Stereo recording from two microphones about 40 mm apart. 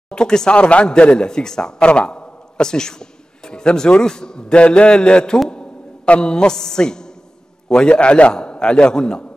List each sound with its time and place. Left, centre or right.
0.1 s speech: centre
0.6 s a man's voice: left
1.8 s a sound: left
4.0 s a man's voice: centre